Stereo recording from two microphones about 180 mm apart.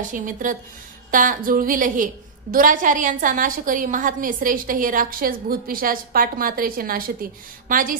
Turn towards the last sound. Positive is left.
turn(degrees=-50)  # may be behind; listen again after turning